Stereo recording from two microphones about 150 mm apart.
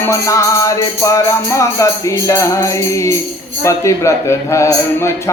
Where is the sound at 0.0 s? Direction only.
20° left (ahead or behind).